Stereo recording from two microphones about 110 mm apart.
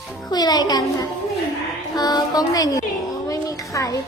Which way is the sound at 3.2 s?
30° left (ahead or behind).